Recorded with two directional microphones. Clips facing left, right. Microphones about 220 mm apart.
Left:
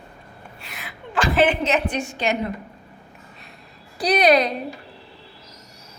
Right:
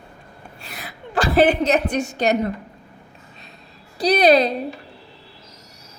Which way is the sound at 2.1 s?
40° right (ahead or behind).